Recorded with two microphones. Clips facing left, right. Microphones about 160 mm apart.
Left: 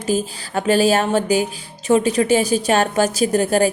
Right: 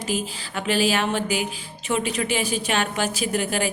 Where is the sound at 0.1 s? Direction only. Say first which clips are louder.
Left 8 dB; 40° left (ahead or behind).